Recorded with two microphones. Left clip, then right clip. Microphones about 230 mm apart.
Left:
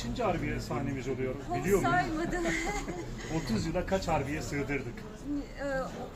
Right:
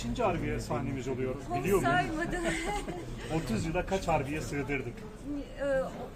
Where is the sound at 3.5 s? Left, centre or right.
Right.